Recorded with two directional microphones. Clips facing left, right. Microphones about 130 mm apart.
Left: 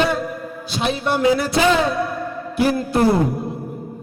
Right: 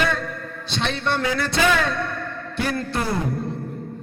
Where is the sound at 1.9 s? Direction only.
5° left (ahead or behind).